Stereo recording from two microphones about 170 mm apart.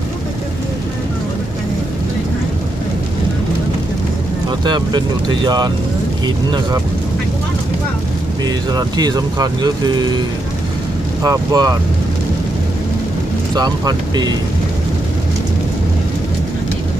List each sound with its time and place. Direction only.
4.6 s speech: 25° right (ahead or behind)
8.4 s speech: 25° right (ahead or behind)
11.2 s speech: 20° right (ahead or behind)
13.6 s speech: 25° right (ahead or behind)